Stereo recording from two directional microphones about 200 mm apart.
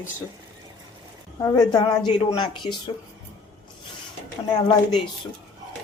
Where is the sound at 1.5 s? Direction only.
20° left (ahead or behind).